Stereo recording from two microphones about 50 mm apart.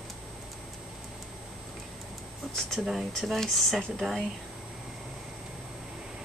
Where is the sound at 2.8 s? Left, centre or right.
Centre.